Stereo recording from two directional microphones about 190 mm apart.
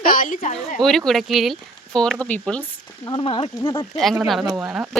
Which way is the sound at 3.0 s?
25° left (ahead or behind).